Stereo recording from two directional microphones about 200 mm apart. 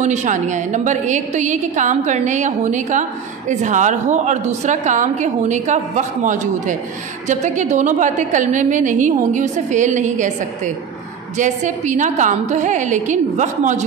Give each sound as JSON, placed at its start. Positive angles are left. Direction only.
{"t": 0.0, "sound": "a woman's voice", "side_deg": -35}